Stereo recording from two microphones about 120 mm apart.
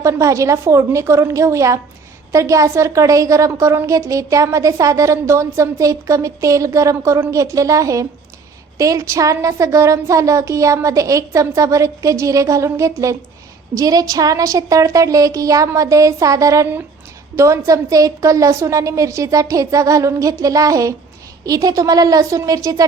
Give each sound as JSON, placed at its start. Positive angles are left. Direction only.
{"t": 0.0, "sound": "a woman's voice", "side_deg": -25}